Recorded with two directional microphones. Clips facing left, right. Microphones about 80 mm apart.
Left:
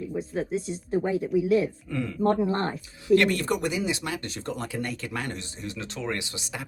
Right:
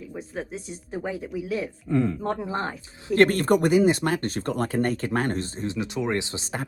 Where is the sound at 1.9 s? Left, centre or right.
Right.